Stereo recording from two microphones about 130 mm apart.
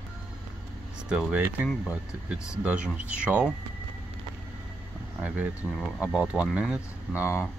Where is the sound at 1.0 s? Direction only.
10° right (ahead or behind).